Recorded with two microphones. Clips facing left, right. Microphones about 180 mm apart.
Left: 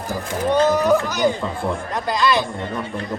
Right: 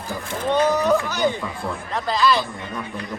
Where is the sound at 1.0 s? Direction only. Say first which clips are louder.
Left 3 dB; 15° left (ahead or behind).